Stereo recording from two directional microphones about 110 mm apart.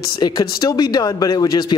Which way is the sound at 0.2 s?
35° left (ahead or behind).